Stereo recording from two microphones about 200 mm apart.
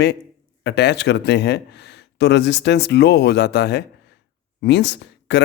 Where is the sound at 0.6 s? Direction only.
55° left (ahead or behind).